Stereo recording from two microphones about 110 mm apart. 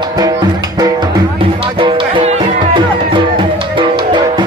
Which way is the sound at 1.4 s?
55° right (ahead or behind).